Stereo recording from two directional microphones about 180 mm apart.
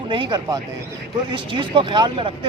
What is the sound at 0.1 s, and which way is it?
Speech, 25° right (ahead or behind).